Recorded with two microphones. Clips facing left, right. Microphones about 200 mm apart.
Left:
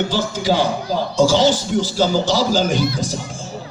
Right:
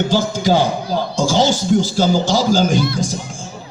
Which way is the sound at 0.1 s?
45° right (ahead or behind).